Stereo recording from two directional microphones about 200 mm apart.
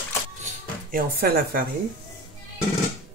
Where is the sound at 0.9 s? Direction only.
50° right (ahead or behind).